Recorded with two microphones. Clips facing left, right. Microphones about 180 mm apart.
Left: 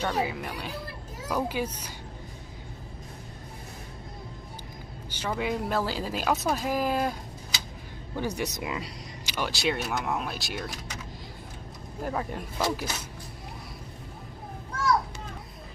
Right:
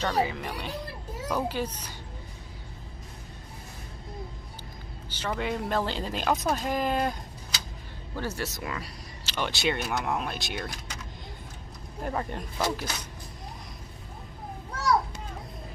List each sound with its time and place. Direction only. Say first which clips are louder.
0.0 s speech: right 1 dB; 5° left (ahead or behind)
5.1 s a woman's voice: left 1 dB; 10° left (ahead or behind)
8.2 s speech: left 2 dB; 15° left (ahead or behind)
9.5 s speech: even; centre (ahead or behind)
12.0 s speech: even; centre (ahead or behind)